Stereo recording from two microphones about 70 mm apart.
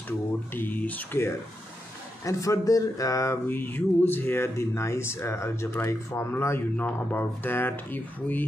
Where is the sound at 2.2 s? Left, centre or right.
Left.